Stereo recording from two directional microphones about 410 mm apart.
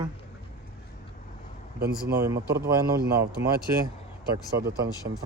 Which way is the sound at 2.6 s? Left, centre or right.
Right.